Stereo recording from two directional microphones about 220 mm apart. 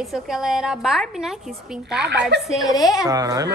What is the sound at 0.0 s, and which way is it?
A woman's voice, centre (ahead or behind).